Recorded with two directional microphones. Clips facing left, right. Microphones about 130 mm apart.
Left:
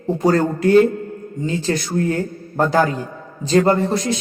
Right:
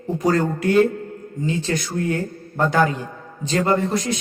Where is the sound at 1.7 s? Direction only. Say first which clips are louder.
Left 6 dB; 40° left (ahead or behind).